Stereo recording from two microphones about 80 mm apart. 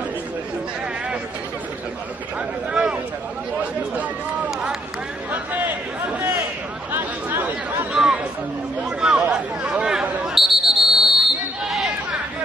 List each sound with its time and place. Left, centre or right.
2.7 s a sound: centre
5.3 s a sound: right
6.9 s chatter: right
7.9 s chatter: centre
9.3 s buzzer: centre
11.6 s basketball bounce: centre